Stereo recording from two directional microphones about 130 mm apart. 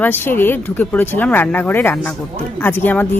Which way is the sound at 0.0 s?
15° left (ahead or behind).